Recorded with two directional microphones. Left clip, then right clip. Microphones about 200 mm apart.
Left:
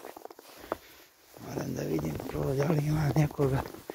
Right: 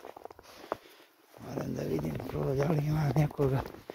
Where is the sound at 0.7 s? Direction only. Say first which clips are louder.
Left 1 dB; 55° left (ahead or behind).